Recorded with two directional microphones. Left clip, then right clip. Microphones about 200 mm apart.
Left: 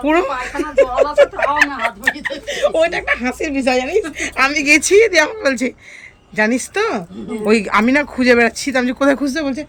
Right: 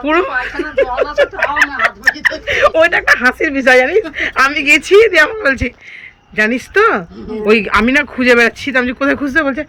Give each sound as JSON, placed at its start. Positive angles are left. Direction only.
{"t": 0.0, "sound": "speech", "side_deg": 15}
{"t": 3.4, "sound": "a woman's voice", "side_deg": -35}
{"t": 4.4, "sound": "speech", "side_deg": 15}